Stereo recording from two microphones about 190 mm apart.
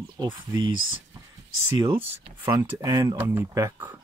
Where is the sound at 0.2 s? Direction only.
20° right (ahead or behind).